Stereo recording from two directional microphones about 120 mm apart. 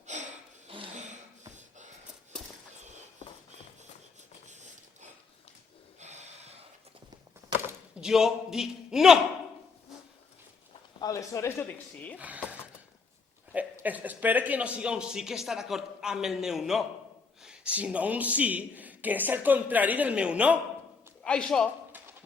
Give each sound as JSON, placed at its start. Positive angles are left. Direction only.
{"t": 0.9, "sound": "a sound", "side_deg": -80}
{"t": 6.0, "sound": "snort", "side_deg": -70}
{"t": 8.0, "sound": "speech", "side_deg": -5}
{"t": 11.0, "sound": "speech", "side_deg": 30}
{"t": 12.1, "sound": "speech", "side_deg": -10}
{"t": 13.8, "sound": "speech", "side_deg": -15}
{"t": 21.2, "sound": "a man's voice", "side_deg": 5}